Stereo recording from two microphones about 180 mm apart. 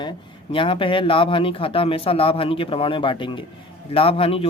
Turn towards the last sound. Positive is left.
turn(degrees=30)  # may be behind; listen again after turning